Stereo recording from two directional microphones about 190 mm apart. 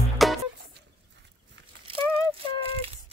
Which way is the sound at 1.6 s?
70° right (ahead or behind).